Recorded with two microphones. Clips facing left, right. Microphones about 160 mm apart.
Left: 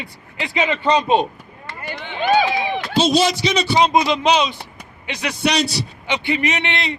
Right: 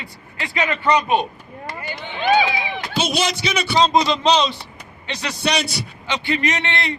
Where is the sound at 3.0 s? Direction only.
35° left (ahead or behind).